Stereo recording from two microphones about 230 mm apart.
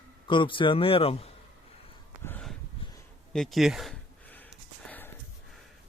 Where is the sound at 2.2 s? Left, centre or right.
Centre.